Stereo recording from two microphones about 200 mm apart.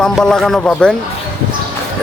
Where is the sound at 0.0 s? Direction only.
5° left (ahead or behind).